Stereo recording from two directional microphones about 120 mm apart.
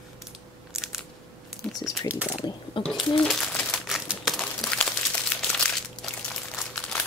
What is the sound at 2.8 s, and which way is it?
Speech, centre (ahead or behind).